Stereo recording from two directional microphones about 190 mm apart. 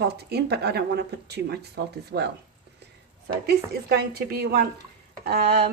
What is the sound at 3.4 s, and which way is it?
Speech, 55° right (ahead or behind).